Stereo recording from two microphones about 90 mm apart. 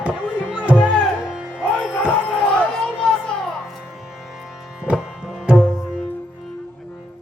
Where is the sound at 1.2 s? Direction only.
10° right (ahead or behind).